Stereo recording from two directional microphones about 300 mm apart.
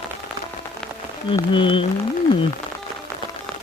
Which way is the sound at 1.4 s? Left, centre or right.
Centre.